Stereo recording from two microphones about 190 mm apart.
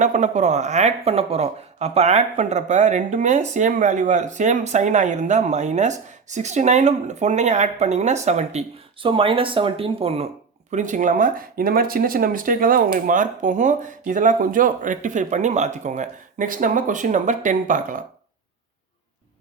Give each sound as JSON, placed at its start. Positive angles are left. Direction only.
{"t": 0.0, "sound": "speech", "side_deg": -40}
{"t": 10.7, "sound": "speech", "side_deg": -40}